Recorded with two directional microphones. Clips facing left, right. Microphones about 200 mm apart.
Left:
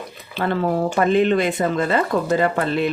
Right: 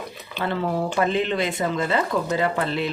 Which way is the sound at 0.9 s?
50° left (ahead or behind).